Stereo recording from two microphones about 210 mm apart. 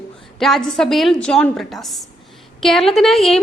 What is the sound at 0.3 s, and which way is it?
A woman's voice, centre (ahead or behind).